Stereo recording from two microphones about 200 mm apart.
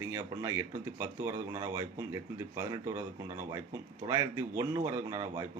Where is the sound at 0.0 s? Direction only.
15° right (ahead or behind).